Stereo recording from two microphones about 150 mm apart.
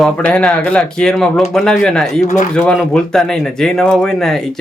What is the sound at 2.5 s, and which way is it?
Speech, 5° left (ahead or behind).